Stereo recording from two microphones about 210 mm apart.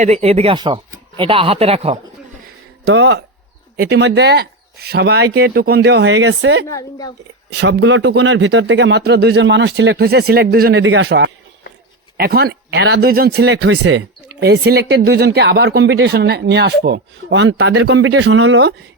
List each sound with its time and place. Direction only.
0.0 s speech: 30° right (ahead or behind)
2.8 s speech: 55° right (ahead or behind)
6.7 s a woman's voice: 15° left (ahead or behind)
7.5 s speech: 55° right (ahead or behind)
10.8 s speech: 65° right (ahead or behind)